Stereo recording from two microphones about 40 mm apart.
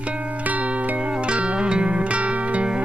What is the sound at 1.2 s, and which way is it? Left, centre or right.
Music, right.